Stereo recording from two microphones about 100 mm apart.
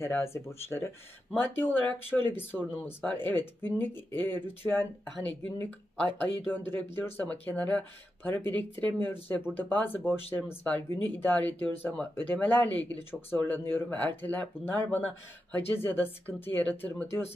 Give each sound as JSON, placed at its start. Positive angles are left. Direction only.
{"t": 0.0, "sound": "speech", "side_deg": 25}